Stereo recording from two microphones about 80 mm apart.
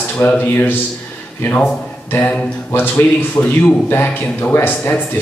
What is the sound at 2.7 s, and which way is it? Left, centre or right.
A man's voice, left.